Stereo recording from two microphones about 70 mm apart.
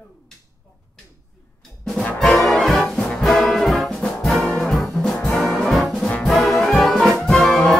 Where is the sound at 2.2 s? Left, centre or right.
Centre.